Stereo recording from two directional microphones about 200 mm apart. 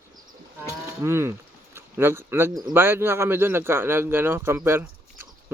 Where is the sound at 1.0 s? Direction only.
15° right (ahead or behind).